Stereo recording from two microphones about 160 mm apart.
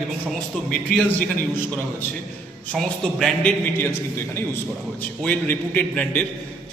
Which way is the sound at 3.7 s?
15° left (ahead or behind).